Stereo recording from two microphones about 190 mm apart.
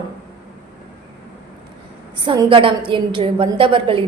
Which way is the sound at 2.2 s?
25° right (ahead or behind).